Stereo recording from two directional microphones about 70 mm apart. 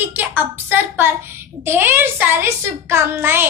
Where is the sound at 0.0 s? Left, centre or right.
Right.